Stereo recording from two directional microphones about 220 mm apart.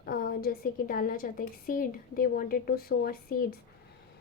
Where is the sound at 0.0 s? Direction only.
40° left (ahead or behind).